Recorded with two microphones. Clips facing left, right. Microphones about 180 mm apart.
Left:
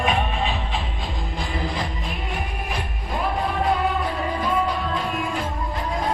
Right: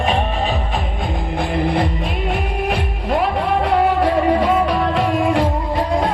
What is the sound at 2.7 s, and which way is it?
Music, 65° right (ahead or behind).